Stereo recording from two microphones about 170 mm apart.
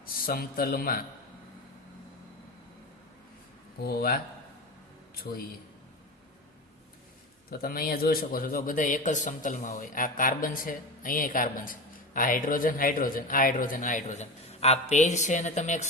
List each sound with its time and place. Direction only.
0.0 s a man's voice: 60° left (ahead or behind)
3.8 s a man's voice: 60° left (ahead or behind)
7.5 s a man's voice: 60° left (ahead or behind); by 15.9 s 45° left (ahead or behind)